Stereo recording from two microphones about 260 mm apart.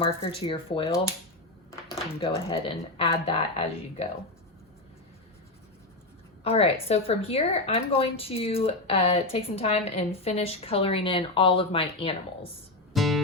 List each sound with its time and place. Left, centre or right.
0.0 s a woman's voice: left
2.2 s a woman's voice: centre
6.4 s a woman's voice: left
12.9 s music: centre